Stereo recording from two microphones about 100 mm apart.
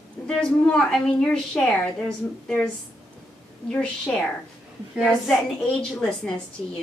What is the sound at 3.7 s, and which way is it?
A woman's voice, 10° left (ahead or behind).